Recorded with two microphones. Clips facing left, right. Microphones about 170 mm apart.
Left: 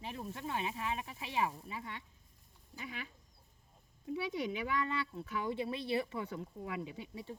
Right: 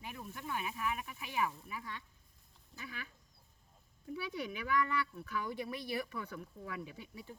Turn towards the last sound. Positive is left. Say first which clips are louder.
# left 4 dB
turn(degrees=25)  # may be behind; listen again after turning